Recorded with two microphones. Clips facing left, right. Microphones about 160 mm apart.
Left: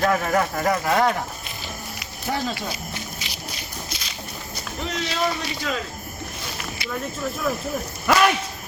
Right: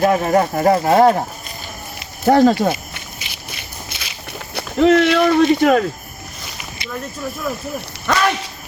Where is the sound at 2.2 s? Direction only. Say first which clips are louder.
Right 15 dB; 60° right (ahead or behind).